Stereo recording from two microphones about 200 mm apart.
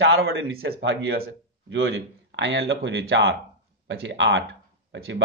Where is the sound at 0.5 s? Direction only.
50° right (ahead or behind).